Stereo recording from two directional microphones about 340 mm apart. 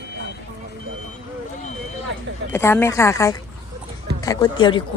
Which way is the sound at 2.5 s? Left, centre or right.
Centre.